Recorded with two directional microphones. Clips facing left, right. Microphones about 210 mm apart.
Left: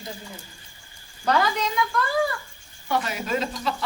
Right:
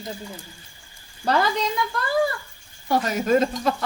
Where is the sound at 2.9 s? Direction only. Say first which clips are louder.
Right 6 dB; 40° right (ahead or behind).